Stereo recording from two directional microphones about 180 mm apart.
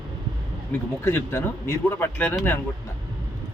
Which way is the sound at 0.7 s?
10° left (ahead or behind).